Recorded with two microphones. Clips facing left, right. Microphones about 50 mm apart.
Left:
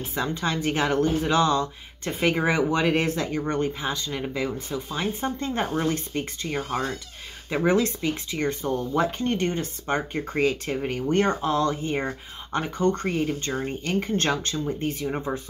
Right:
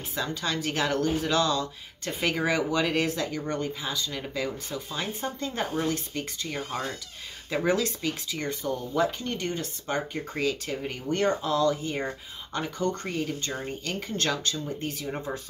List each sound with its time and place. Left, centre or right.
0.1 s speech: left
4.2 s speech: centre